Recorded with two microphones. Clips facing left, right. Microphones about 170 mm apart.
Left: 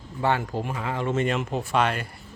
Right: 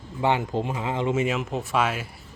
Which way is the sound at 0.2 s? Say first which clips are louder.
Right 1 dB; 15° right (ahead or behind).